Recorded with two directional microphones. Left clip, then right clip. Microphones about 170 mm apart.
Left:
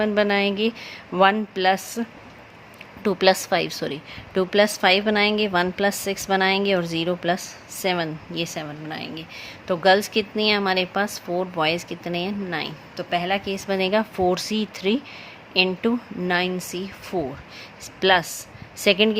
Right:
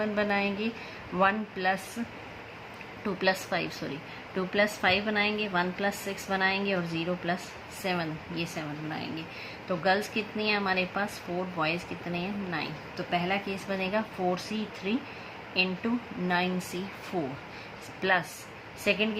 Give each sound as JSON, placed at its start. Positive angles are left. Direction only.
{"t": 0.0, "sound": "speech", "side_deg": 60}
{"t": 3.0, "sound": "a woman's voice", "side_deg": 70}
{"t": 16.3, "sound": "speech", "side_deg": 50}
{"t": 18.0, "sound": "a woman's voice", "side_deg": 60}